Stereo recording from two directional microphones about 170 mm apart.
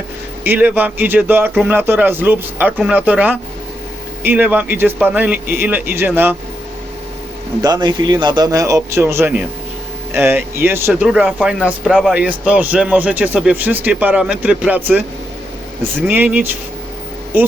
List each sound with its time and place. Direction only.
0.4 s speech: 10° right (ahead or behind)
7.6 s a man's voice: 25° right (ahead or behind)